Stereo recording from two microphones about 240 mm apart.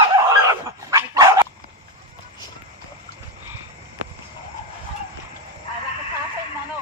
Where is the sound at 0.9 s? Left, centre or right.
Centre.